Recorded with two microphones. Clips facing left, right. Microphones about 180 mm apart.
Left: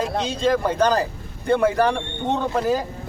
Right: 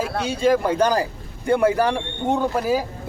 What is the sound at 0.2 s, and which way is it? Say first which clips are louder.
A man's voice: right 3 dB; 10° right (ahead or behind).